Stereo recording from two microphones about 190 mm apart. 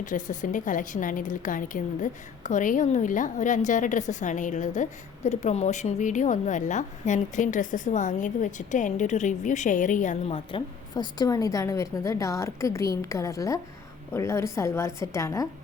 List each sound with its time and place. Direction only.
0.0 s a woman's voice: 40° left (ahead or behind); by 15.4 s 15° left (ahead or behind)